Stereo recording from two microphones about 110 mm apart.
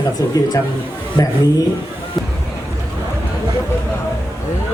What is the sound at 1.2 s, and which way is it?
Speech, 35° left (ahead or behind).